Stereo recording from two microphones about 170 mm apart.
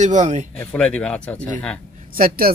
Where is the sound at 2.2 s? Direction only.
60° right (ahead or behind).